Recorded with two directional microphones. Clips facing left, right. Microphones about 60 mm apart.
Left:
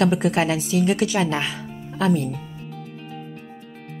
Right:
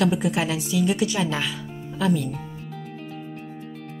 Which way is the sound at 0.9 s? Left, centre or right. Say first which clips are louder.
Left 3 dB; left.